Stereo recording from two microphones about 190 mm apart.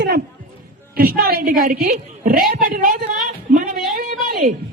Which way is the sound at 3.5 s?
50° right (ahead or behind).